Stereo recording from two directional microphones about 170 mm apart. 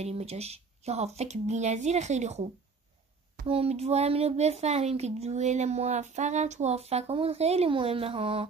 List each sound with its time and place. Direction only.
0.0 s speech: 40° right (ahead or behind)